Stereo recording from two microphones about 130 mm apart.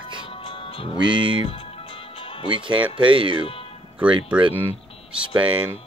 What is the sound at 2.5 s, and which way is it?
Speech, 40° right (ahead or behind).